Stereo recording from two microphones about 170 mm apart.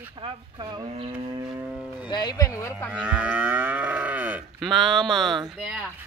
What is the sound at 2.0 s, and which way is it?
Speech, 25° left (ahead or behind).